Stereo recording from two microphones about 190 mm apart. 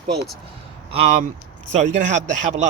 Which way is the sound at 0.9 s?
35° right (ahead or behind).